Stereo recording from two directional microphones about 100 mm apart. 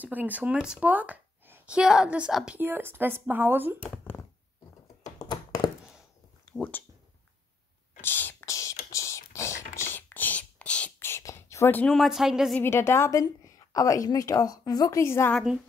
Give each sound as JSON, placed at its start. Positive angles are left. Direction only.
{"t": 0.0, "sound": "speech", "side_deg": -15}
{"t": 2.6, "sound": "speech", "side_deg": -20}
{"t": 3.8, "sound": "a sound", "side_deg": 15}
{"t": 5.0, "sound": "computer keyboard", "side_deg": 40}
{"t": 6.5, "sound": "speech", "side_deg": 5}
{"t": 8.0, "sound": "a sound", "side_deg": 20}
{"t": 11.0, "sound": "whispering", "side_deg": 25}
{"t": 11.7, "sound": "speech", "side_deg": 10}
{"t": 12.0, "sound": "speech", "side_deg": -5}
{"t": 12.5, "sound": "a woman's voice", "side_deg": 25}
{"t": 13.2, "sound": "a woman's voice", "side_deg": 35}